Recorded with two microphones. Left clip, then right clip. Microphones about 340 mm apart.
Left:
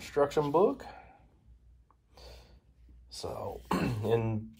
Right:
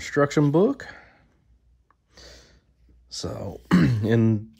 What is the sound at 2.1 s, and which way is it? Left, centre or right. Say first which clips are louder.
Snort: right 6 dB; right.